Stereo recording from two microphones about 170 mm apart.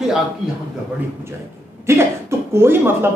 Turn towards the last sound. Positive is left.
turn(degrees=-15)  # may be behind; listen again after turning